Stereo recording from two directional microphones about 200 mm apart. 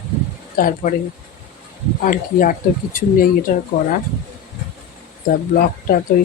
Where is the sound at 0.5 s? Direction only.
45° left (ahead or behind).